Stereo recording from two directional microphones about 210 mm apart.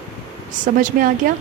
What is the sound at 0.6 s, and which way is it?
Speech, 40° right (ahead or behind).